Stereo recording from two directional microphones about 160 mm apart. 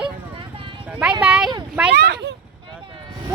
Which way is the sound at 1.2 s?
5° right (ahead or behind).